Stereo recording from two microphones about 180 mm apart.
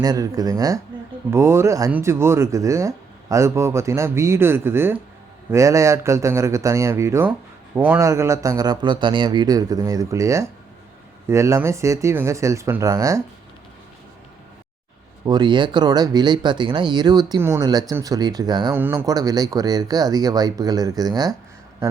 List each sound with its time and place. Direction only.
0.0 s speech: 20° right (ahead or behind)
15.3 s speech: 25° right (ahead or behind)
18.7 s speech: 10° right (ahead or behind)